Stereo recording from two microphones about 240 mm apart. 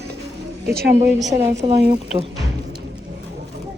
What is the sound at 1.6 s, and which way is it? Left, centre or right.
Speech, right.